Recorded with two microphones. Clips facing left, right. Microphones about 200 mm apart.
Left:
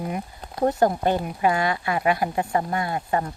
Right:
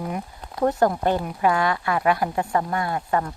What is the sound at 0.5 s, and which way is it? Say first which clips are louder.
Speech: even; 25° left (ahead or behind).